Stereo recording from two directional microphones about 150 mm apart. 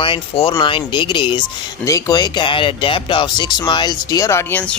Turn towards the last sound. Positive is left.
turn(degrees=15)  # may be behind; listen again after turning